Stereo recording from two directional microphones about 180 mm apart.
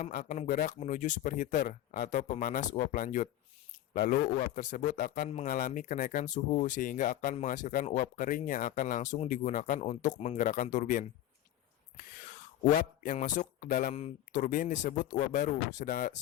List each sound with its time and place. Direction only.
0.0 s speech: 50° left (ahead or behind)
12.6 s speech: 50° left (ahead or behind)
13.9 s speech: 40° left (ahead or behind)